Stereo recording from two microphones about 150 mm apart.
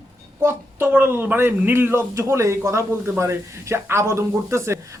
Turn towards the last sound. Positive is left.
turn(degrees=-20)  # may be behind; listen again after turning